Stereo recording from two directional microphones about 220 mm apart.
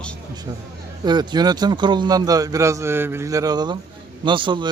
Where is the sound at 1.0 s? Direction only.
20° right (ahead or behind).